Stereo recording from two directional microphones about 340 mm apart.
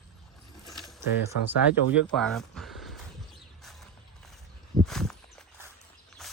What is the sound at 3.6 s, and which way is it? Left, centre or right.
Mechanisms, centre.